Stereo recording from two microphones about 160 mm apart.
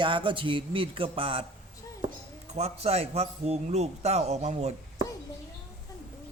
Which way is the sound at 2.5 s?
40° right (ahead or behind).